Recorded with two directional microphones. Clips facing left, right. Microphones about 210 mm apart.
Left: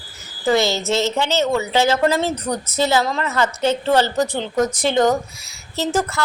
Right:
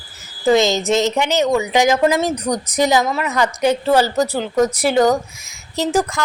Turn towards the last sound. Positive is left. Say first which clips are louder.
# right 2 dB
turn(degrees=-15)  # may be behind; listen again after turning